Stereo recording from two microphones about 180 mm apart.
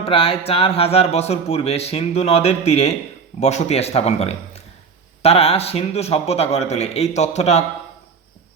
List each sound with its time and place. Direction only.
0.0 s speech: 30° left (ahead or behind)